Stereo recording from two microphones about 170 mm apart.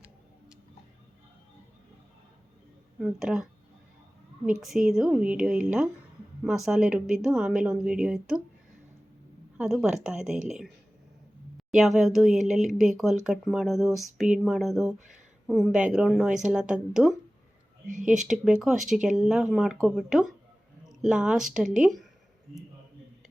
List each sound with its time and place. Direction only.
3.0 s speech: 5° right (ahead or behind)
4.9 s speech: 5° right (ahead or behind)
9.6 s speech: 5° right (ahead or behind)
11.7 s speech: 5° right (ahead or behind)
14.9 s speech: 50° right (ahead or behind)
15.4 s speech: centre (ahead or behind)